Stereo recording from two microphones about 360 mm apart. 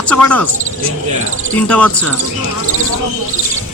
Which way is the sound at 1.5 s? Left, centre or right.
Centre.